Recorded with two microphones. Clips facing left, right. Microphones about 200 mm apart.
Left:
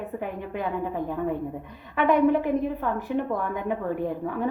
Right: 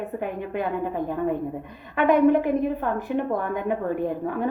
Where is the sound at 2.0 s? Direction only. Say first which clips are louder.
Right 2 dB; 55° right (ahead or behind).